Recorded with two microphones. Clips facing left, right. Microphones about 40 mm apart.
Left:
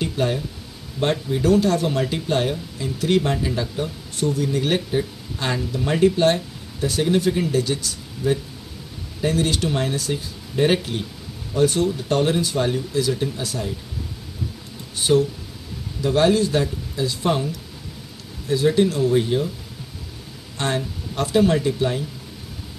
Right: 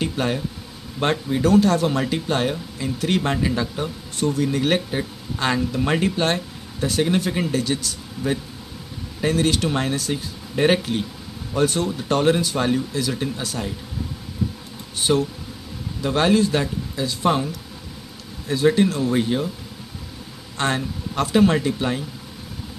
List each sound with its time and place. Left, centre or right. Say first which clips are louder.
0.0 s a sound: even; right
0.9 s speech: even; right
1.4 s speech: right 2 dB; right
14.4 s heart sounds: right 5 dB; right
16.0 s speech: left 1 dB; right
20.5 s speech: right 1 dB; right